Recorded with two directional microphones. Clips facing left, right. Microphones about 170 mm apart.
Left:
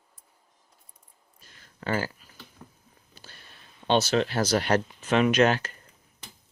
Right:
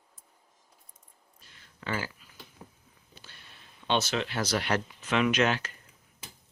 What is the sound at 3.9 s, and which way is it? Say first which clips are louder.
Speech: left 6 dB; 40° left (ahead or behind).